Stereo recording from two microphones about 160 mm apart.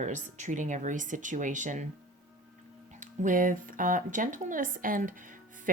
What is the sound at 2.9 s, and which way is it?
Speech, 50° right (ahead or behind).